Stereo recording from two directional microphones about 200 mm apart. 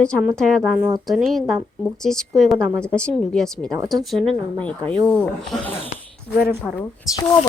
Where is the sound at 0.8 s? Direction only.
15° right (ahead or behind).